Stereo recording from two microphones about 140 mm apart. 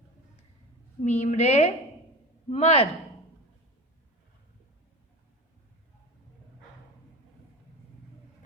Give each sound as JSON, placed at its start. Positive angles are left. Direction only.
{"t": 1.0, "sound": "a woman's voice", "side_deg": 55}